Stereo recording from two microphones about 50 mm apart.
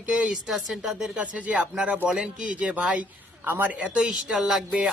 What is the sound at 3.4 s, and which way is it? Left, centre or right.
Speech, right.